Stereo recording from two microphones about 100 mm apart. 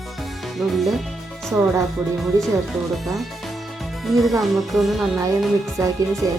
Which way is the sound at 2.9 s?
Centre (ahead or behind).